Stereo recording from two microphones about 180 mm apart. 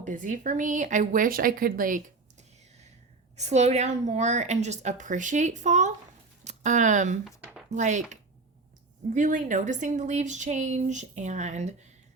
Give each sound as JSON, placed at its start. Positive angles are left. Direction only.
{"t": 0.0, "sound": "a woman's voice", "side_deg": -45}
{"t": 3.3, "sound": "speech", "side_deg": -40}
{"t": 7.3, "sound": "a sound", "side_deg": -5}
{"t": 7.7, "sound": "speech", "side_deg": -40}